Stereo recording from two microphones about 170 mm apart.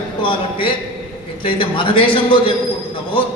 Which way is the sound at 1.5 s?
30° left (ahead or behind).